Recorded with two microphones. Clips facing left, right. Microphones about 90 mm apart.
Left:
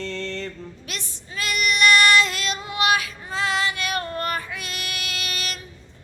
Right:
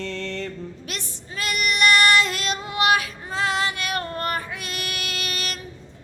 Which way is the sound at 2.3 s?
45° right (ahead or behind).